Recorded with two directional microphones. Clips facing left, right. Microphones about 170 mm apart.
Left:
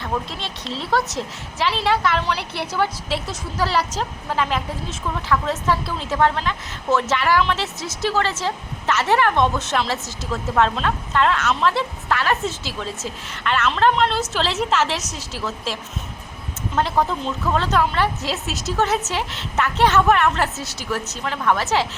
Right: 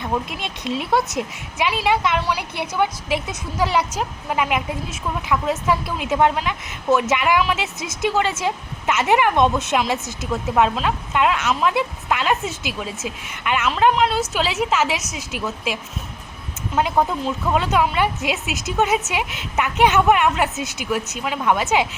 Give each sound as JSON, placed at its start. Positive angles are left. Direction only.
{"t": 0.0, "sound": "speech", "side_deg": -15}